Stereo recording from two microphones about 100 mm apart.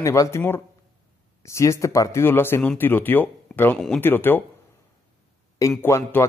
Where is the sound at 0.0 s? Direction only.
30° left (ahead or behind).